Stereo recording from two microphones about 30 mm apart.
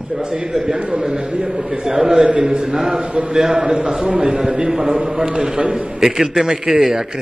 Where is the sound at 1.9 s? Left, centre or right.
Right.